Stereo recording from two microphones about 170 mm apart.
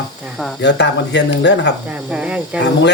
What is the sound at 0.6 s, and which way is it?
Speech, 90° left.